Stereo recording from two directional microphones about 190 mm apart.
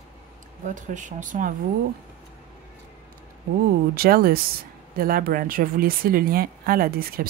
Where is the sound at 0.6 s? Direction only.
40° right (ahead or behind).